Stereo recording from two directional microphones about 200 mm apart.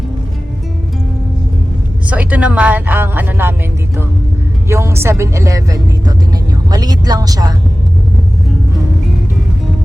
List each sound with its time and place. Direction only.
2.0 s speech: 5° right (ahead or behind)
4.7 s a woman's voice: 15° right (ahead or behind)